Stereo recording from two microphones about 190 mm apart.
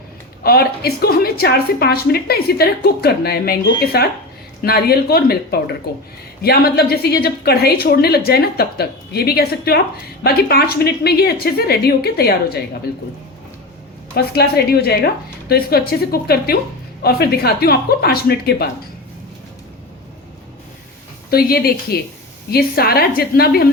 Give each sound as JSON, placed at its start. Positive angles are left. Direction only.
{"t": 0.4, "sound": "a woman's voice", "side_deg": 55}
{"t": 14.3, "sound": "a woman's voice", "side_deg": 55}
{"t": 21.2, "sound": "a woman's voice", "side_deg": 55}